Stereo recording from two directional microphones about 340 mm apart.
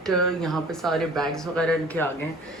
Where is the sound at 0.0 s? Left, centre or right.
Centre.